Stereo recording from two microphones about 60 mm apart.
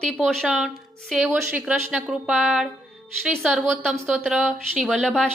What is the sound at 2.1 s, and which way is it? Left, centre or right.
Speech, centre.